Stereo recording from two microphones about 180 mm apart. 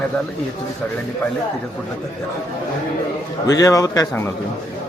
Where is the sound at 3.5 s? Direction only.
20° left (ahead or behind).